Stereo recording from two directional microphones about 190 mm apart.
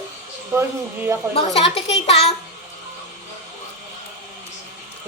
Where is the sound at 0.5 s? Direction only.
15° right (ahead or behind).